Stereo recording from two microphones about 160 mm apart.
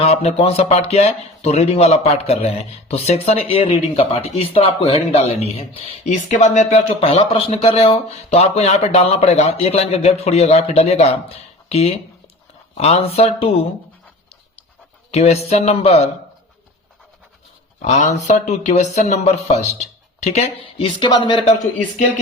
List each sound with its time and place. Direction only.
0.0 s speech: 40° left (ahead or behind)
15.1 s speech: 40° left (ahead or behind)
17.8 s speech: 45° left (ahead or behind); by 21.5 s 30° left (ahead or behind)